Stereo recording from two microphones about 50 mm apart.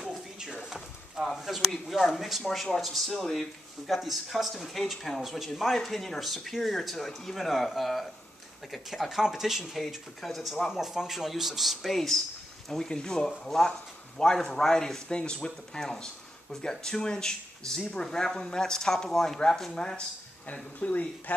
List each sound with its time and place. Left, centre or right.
0.0 s speech: centre
20.5 s speech: left